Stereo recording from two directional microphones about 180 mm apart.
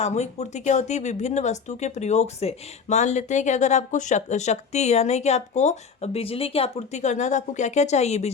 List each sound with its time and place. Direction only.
0.0 s speech: 40° left (ahead or behind)